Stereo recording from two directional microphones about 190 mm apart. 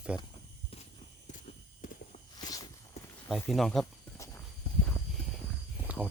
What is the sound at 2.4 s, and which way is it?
Walk, 20° left (ahead or behind).